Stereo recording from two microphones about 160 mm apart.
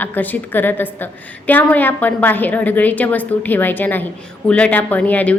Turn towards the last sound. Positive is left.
turn(degrees=10)  # may be behind; listen again after turning